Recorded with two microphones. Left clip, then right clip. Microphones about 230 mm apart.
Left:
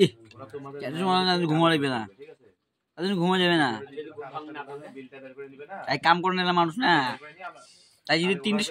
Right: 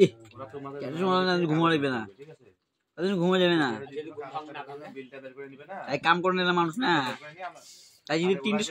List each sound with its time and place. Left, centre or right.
0.4 s a sound: right
0.7 s speech: left
4.0 s a man's voice: right
5.9 s speech: left